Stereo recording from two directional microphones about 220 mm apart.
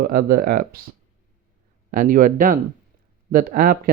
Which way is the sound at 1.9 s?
40° right (ahead or behind).